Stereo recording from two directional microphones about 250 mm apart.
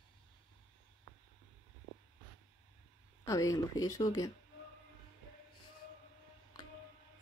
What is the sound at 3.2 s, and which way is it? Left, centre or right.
A woman's voice, centre.